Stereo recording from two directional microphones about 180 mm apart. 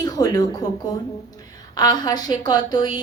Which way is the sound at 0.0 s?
20° left (ahead or behind).